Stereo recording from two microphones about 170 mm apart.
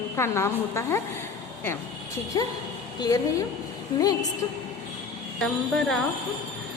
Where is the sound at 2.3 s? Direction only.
20° left (ahead or behind).